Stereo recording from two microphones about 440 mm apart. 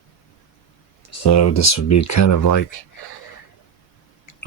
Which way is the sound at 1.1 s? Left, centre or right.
Left.